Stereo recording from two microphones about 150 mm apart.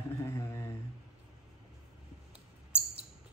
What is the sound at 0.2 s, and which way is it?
Mantra, 20° left (ahead or behind).